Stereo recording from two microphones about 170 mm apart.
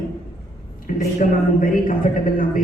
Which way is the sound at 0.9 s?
50° left (ahead or behind).